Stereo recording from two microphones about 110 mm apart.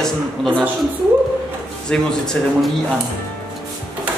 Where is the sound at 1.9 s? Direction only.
5° left (ahead or behind).